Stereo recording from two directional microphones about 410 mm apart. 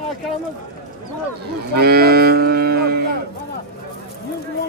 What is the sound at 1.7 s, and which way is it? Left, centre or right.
Cattle, right.